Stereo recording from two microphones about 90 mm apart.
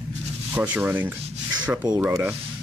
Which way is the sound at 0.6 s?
20° right (ahead or behind).